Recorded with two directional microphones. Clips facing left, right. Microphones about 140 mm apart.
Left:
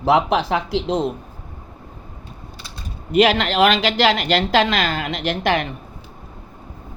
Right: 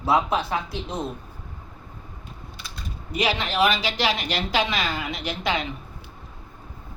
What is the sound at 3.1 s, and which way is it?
A woman's voice, 65° left (ahead or behind).